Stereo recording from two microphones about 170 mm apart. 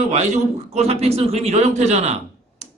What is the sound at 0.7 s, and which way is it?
A man's voice, 40° right (ahead or behind).